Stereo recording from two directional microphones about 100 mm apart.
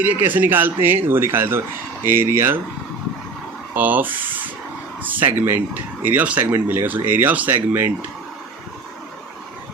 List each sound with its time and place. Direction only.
0.0 s speech: 20° right (ahead or behind)
3.8 s speech: 20° right (ahead or behind)